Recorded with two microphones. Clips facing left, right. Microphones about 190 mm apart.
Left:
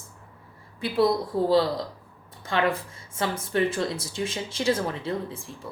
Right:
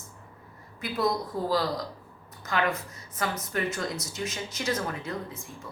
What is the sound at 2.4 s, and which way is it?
A woman's voice, 30° left (ahead or behind).